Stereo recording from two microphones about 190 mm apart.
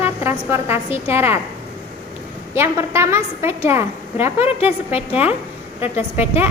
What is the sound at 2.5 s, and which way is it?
A child's voice, 15° right (ahead or behind).